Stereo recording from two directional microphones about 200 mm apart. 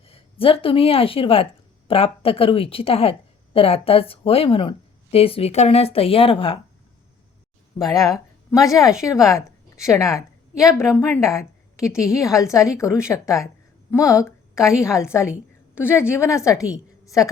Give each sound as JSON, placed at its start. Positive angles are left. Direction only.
{"t": 0.0, "sound": "a woman's voice", "side_deg": 25}
{"t": 7.8, "sound": "a woman's voice", "side_deg": 20}